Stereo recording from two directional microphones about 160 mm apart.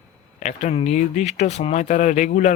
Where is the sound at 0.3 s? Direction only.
45° left (ahead or behind).